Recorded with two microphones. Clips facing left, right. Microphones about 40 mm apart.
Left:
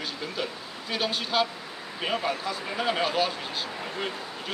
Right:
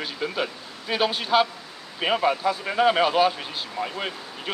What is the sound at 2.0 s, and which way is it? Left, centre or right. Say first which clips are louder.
Speech: right 6 dB; right.